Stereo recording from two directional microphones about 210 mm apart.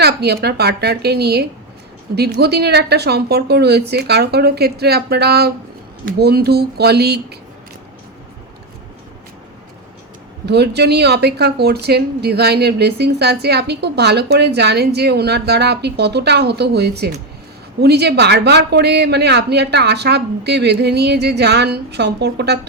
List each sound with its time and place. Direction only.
0.0 s a woman's voice: 50° right (ahead or behind)
10.4 s a woman's voice: 50° right (ahead or behind)